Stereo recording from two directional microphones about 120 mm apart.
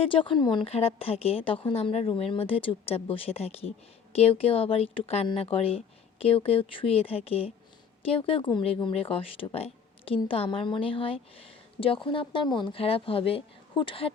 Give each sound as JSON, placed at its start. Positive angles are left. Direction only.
{"t": 0.0, "sound": "speech", "side_deg": 45}
{"t": 0.6, "sound": "speech", "side_deg": 55}